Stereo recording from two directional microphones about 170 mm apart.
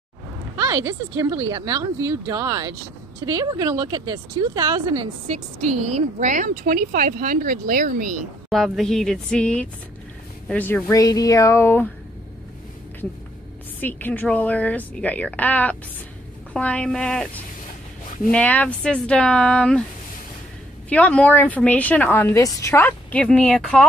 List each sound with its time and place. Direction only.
0.6 s speech: 15° right (ahead or behind)
5.6 s speech: 40° right (ahead or behind)
8.5 s a woman's voice: centre (ahead or behind)
13.7 s a woman's voice: 10° left (ahead or behind)
18.3 s a woman's voice: 10° left (ahead or behind)
20.9 s a woman's voice: 5° left (ahead or behind)